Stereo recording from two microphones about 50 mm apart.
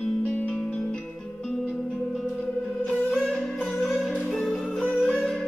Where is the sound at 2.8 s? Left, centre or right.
Left.